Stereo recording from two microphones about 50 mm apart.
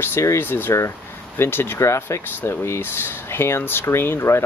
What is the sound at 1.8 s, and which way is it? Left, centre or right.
Speech, left.